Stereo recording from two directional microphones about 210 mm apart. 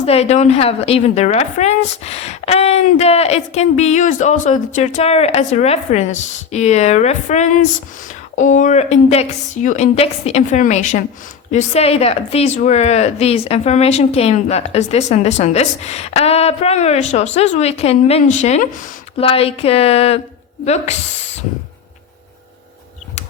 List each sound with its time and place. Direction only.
0.0 s speech: 30° left (ahead or behind)